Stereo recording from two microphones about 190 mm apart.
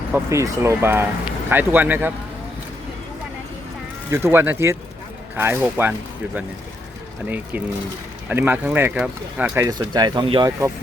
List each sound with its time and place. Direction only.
0.1 s speech: 15° right (ahead or behind)
4.1 s speech: 15° right (ahead or behind)
7.3 s speech: 10° right (ahead or behind)
9.6 s speech: 20° right (ahead or behind)